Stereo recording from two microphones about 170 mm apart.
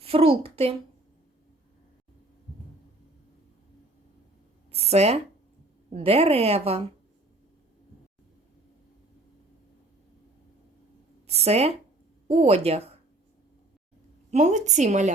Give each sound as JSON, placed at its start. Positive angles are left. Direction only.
{"t": 0.0, "sound": "a child's voice", "side_deg": -35}
{"t": 4.7, "sound": "a woman's voice", "side_deg": -40}
{"t": 11.3, "sound": "a woman's voice", "side_deg": -40}
{"t": 14.3, "sound": "a woman's voice", "side_deg": -45}